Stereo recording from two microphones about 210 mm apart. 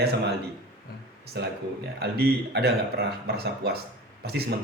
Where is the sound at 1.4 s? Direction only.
55° right (ahead or behind).